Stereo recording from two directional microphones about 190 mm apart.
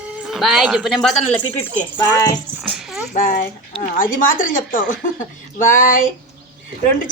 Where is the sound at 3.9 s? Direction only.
45° left (ahead or behind).